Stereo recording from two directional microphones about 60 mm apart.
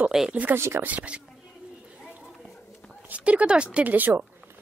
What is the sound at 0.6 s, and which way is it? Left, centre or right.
Speech, right.